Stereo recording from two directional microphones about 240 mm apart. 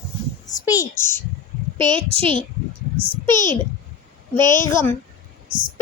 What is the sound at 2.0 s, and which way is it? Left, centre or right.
A child's voice, right.